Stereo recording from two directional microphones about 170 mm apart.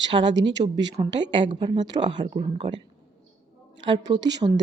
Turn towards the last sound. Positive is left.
turn(degrees=-25)  # may be behind; listen again after turning